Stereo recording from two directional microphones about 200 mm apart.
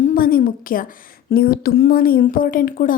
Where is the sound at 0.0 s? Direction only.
45° left (ahead or behind).